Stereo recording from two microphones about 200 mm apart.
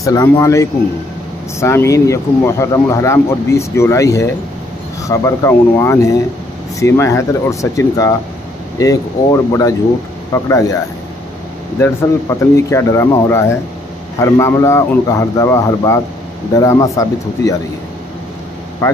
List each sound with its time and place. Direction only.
0.0 s speech: 15° left (ahead or behind)
11.8 s speech: 15° left (ahead or behind)
18.8 s speech: 15° left (ahead or behind)